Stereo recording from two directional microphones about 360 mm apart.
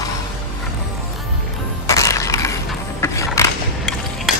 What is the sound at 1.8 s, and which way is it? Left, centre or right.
Mechanisms, centre.